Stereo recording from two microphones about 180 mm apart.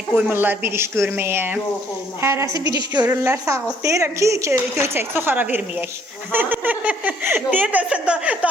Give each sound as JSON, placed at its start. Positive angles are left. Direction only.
{"t": 0.1, "sound": "a woman's voice", "side_deg": -5}
{"t": 2.5, "sound": "a woman's voice", "side_deg": 25}
{"t": 3.0, "sound": "a woman's voice", "side_deg": -15}